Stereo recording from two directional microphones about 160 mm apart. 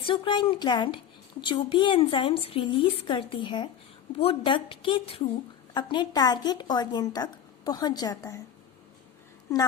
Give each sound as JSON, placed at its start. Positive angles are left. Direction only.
{"t": 0.1, "sound": "a woman's voice", "side_deg": 30}